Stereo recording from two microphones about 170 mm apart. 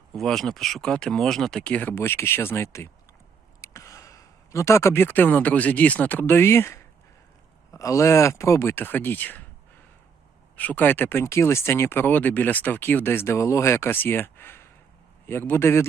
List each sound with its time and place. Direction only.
0.2 s speech: centre (ahead or behind)
10.6 s speech: 10° left (ahead or behind)